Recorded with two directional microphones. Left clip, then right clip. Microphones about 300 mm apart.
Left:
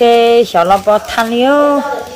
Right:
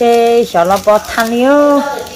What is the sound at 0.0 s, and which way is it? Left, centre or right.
Speech, centre.